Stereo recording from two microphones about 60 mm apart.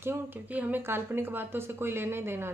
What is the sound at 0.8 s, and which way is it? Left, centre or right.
Speech, right.